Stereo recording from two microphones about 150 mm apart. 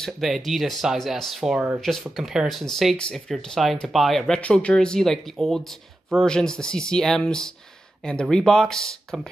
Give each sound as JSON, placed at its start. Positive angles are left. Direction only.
{"t": 0.0, "sound": "speech", "side_deg": 0}